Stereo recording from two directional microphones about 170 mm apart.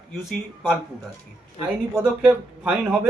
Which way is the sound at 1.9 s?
5° right (ahead or behind).